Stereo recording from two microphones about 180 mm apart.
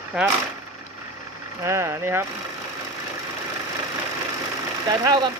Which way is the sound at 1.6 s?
15° right (ahead or behind).